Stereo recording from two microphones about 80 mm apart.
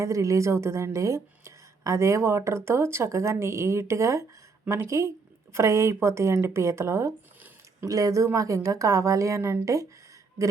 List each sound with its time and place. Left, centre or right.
0.0 s a woman's voice: right